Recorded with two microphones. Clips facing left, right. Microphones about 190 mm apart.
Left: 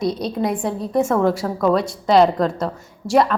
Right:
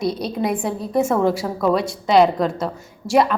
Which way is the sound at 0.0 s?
5° right (ahead or behind).